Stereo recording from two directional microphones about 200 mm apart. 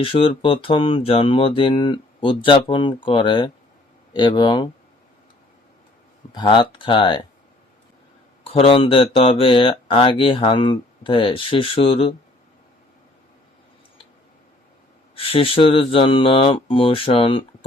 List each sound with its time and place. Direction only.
0.0 s speech: 25° left (ahead or behind)
6.3 s speech: 20° left (ahead or behind)
8.4 s speech: 30° left (ahead or behind)
15.1 s speech: 30° left (ahead or behind)